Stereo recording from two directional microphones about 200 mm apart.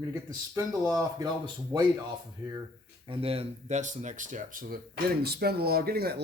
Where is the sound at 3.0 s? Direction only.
25° right (ahead or behind).